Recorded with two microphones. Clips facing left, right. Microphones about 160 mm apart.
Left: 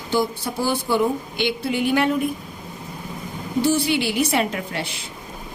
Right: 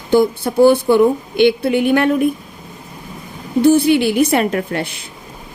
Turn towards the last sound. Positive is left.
turn(degrees=-55)  # may be behind; listen again after turning